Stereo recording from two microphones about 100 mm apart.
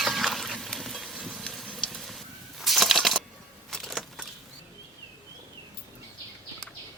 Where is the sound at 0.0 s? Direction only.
Centre (ahead or behind).